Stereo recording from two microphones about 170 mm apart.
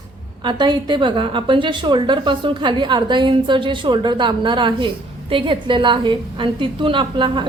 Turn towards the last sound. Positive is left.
turn(degrees=-30)  # may be behind; listen again after turning